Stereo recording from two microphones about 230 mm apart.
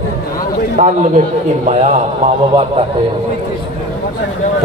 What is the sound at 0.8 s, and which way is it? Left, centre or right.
A man's voice, right.